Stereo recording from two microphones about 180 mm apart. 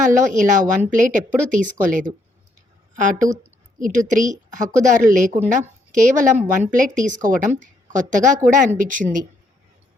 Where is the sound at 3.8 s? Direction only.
45° right (ahead or behind).